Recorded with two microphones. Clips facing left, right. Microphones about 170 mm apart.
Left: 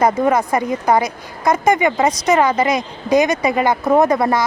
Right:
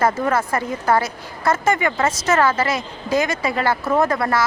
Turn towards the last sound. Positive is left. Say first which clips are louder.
# left 5 dB
turn(degrees=20)  # may be behind; listen again after turning